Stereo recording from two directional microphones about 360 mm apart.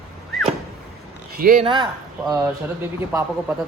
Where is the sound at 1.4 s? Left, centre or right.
Right.